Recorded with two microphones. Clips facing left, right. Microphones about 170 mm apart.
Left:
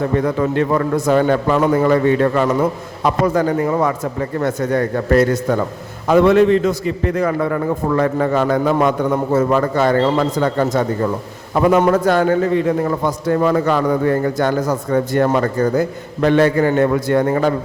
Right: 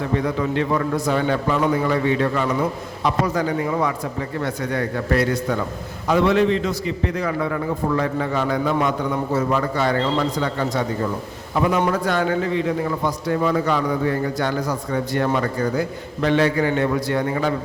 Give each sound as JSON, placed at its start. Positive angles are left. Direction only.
{"t": 0.1, "sound": "a man's voice", "side_deg": 50}